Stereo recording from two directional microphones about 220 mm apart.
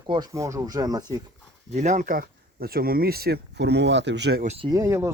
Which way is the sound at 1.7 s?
30° right (ahead or behind).